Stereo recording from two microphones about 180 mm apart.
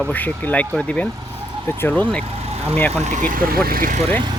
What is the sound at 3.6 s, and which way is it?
Speech, 55° right (ahead or behind).